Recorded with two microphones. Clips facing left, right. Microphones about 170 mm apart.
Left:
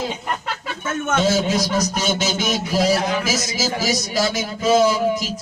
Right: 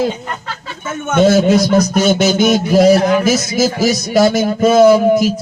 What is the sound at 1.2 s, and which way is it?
A man's voice, 60° right (ahead or behind).